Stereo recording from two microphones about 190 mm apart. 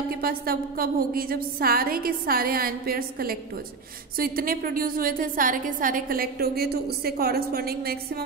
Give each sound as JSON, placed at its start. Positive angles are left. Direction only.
{"t": 0.1, "sound": "a woman's voice", "side_deg": -50}